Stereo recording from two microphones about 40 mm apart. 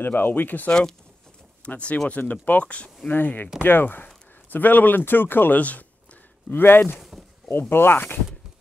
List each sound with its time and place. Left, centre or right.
0.0 s speech: left
0.7 s speech: centre
1.7 s speech: left
3.1 s speech: left
5.6 s speech: left
6.5 s speech: left